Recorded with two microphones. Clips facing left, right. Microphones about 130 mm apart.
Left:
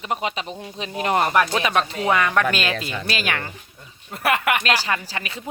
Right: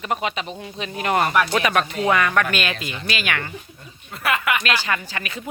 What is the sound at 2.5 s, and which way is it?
Speech, 30° left (ahead or behind).